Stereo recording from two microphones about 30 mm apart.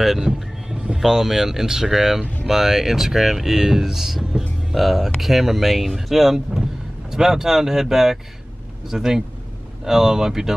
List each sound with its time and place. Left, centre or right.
0.2 s vehicle: centre
0.9 s speech: centre